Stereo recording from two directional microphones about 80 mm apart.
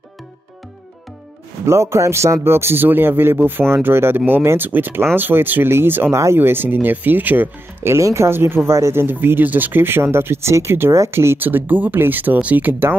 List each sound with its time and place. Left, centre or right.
1.7 s speech: right